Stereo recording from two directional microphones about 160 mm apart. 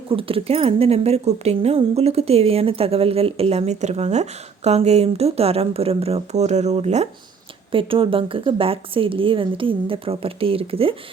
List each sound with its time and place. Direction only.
0.1 s speech: 35° right (ahead or behind)